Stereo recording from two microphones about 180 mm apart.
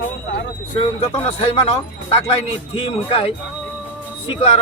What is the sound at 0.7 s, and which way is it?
Speech, 35° left (ahead or behind).